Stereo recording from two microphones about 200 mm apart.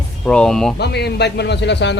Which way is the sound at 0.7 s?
55° left (ahead or behind).